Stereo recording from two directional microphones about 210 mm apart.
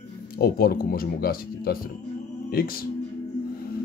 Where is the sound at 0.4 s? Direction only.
45° left (ahead or behind).